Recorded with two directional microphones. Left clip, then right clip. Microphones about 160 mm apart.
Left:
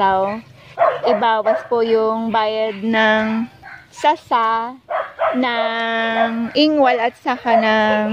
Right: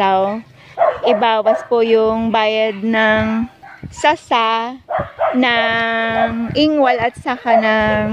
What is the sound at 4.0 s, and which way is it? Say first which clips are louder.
A woman's voice: right 2 dB; 20° right (ahead or behind).